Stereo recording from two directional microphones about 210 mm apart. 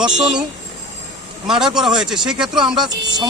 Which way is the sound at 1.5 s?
Centre (ahead or behind).